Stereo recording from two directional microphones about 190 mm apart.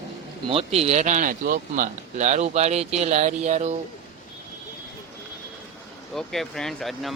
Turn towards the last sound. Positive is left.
turn(degrees=0)  # may be behind; listen again after turning